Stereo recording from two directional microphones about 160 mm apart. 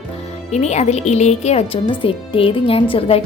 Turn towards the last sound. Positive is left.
turn(degrees=35)  # may be behind; listen again after turning